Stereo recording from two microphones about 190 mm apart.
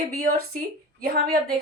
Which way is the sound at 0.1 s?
50° right (ahead or behind).